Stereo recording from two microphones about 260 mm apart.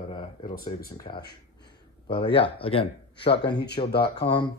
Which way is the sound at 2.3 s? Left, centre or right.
Left.